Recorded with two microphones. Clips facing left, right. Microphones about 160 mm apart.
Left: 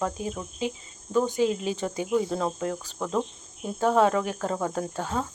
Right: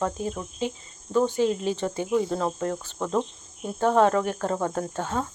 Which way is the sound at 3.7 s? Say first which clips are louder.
Right 1 dB; 5° left (ahead or behind).